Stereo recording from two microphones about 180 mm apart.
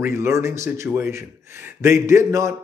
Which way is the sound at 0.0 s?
15° right (ahead or behind).